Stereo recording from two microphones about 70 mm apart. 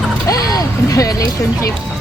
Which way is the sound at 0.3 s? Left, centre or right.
Left.